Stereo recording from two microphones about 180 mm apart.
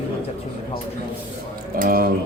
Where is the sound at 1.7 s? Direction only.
50° right (ahead or behind).